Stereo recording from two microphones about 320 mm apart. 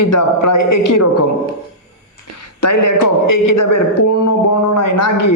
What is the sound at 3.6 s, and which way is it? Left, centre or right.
Speech, left.